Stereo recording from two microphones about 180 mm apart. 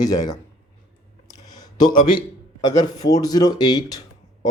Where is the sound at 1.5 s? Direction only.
20° left (ahead or behind).